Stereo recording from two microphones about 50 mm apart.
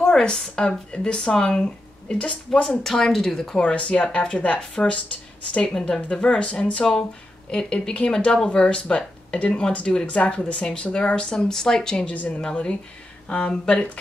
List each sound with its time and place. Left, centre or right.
0.0 s speech: centre
2.6 s speech: centre
3.5 s speech: left
12.1 s speech: left